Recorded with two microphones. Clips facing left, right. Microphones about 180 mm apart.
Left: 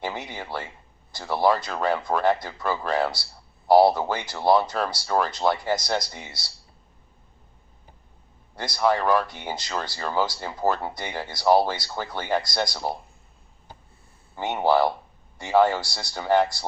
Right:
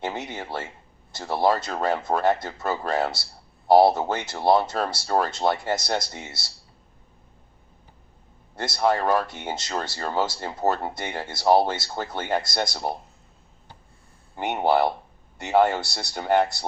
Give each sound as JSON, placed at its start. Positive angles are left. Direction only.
{"t": 0.0, "sound": "speech", "side_deg": -25}
{"t": 8.6, "sound": "speech", "side_deg": -25}
{"t": 14.3, "sound": "speech", "side_deg": -20}